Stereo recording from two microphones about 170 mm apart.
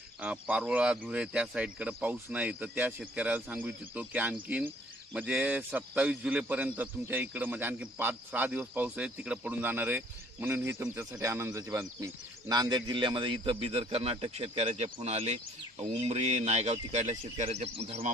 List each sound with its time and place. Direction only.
0.2 s speech: 10° right (ahead or behind); by 18.1 s 35° right (ahead or behind)